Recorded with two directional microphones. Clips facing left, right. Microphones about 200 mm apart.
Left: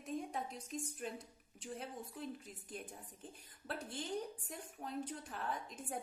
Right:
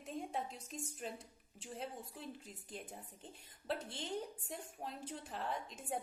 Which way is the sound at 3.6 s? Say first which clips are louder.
Right 2 dB; 25° right (ahead or behind).